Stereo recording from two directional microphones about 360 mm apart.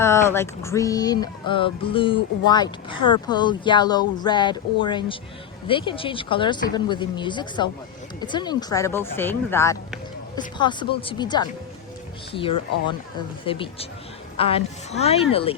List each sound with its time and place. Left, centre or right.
0.0 s speech: centre